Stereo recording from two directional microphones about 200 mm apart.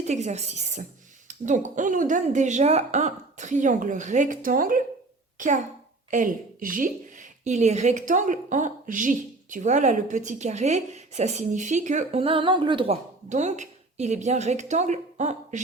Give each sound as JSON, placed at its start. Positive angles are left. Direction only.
{"t": 0.1, "sound": "a woman's voice", "side_deg": -35}
{"t": 6.1, "sound": "a woman's voice", "side_deg": -40}